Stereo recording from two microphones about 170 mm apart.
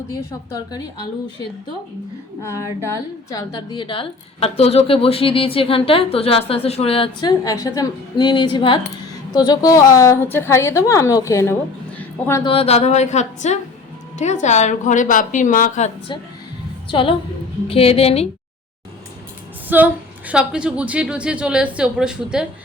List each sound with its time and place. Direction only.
0.5 s a woman's voice: 25° left (ahead or behind)
2.4 s a woman's voice: 15° left (ahead or behind)
3.3 s a woman's voice: 25° left (ahead or behind)
11.9 s a sound: 10° left (ahead or behind)
12.5 s a woman's voice: 35° left (ahead or behind)
16.9 s a woman's voice: 30° left (ahead or behind)
19.6 s a woman's voice: 10° right (ahead or behind)